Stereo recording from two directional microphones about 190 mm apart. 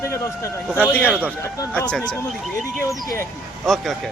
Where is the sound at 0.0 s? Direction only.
15° left (ahead or behind).